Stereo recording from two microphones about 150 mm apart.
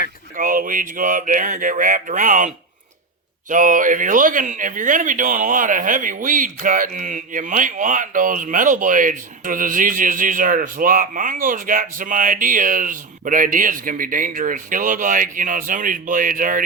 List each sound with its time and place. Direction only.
0.3 s speech: 65° right (ahead or behind)
3.5 s speech: 60° right (ahead or behind)